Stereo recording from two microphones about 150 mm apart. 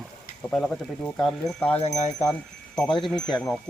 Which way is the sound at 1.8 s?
50° left (ahead or behind).